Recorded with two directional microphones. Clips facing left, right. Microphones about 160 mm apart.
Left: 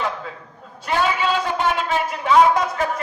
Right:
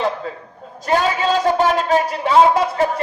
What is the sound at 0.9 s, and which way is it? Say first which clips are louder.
A man's voice: right 3 dB; 40° right (ahead or behind).